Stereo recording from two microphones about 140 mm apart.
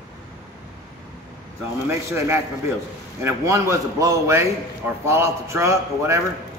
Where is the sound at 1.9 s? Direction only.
20° right (ahead or behind).